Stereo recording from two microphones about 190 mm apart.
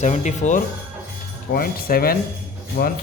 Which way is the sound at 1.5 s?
50° left (ahead or behind).